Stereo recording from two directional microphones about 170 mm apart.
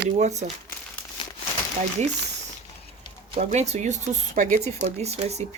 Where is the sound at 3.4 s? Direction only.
40° right (ahead or behind).